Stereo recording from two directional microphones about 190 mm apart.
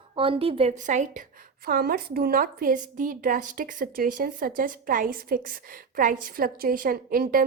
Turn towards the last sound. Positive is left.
turn(degrees=-50)  # may be behind; listen again after turning